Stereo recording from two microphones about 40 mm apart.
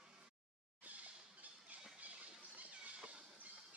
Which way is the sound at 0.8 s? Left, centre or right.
Right.